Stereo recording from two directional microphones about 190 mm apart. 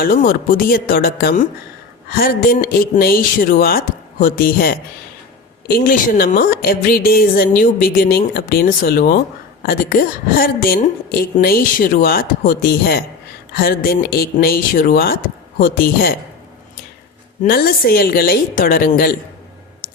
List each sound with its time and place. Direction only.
0.0 s a woman's voice: 45° left (ahead or behind)
17.4 s a woman's voice: 55° left (ahead or behind)